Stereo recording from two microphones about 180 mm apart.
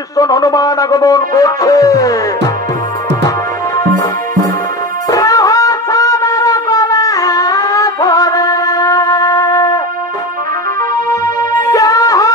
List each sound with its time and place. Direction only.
0.2 s speech: 20° left (ahead or behind)
5.1 s wind instrument: 20° left (ahead or behind)
11.7 s music: 20° left (ahead or behind)